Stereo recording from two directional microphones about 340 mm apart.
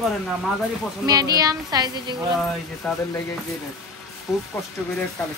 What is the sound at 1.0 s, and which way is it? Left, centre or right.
A child's voice, centre.